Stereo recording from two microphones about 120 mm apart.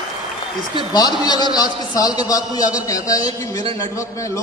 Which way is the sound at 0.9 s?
35° left (ahead or behind).